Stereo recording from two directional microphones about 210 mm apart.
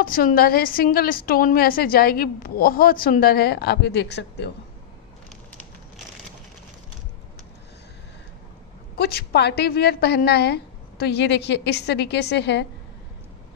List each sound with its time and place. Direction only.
0.0 s a woman's voice: 40° left (ahead or behind)
8.9 s a woman's voice: 50° left (ahead or behind)